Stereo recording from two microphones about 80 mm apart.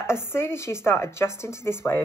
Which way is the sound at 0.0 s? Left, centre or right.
Left.